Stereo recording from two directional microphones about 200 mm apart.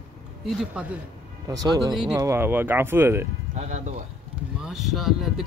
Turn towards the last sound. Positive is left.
turn(degrees=0)  # may be behind; listen again after turning